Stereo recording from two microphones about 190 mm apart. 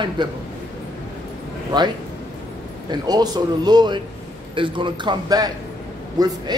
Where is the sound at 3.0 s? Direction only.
20° right (ahead or behind).